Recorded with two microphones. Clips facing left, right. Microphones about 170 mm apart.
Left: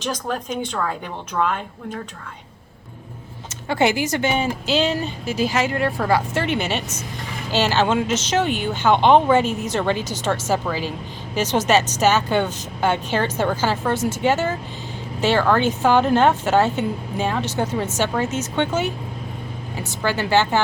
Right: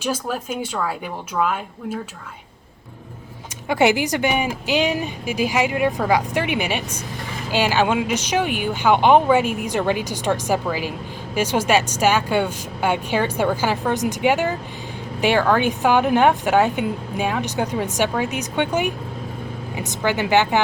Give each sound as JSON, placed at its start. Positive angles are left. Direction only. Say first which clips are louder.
{"t": 0.0, "sound": "speech", "louder": "right 1 dB", "side_deg": -5}
{"t": 3.7, "sound": "speech", "louder": "right 2 dB", "side_deg": -15}